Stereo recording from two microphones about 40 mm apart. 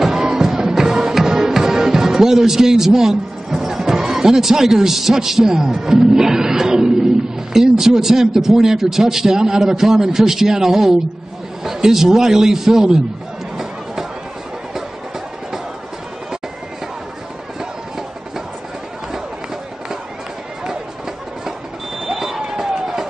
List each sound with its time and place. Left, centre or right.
0.0 s music: centre
1.1 s a man's voice: centre
22.0 s a sound: centre